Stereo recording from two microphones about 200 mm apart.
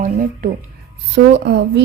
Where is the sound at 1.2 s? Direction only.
55° right (ahead or behind).